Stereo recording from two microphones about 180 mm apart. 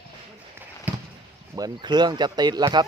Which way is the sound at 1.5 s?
20° right (ahead or behind).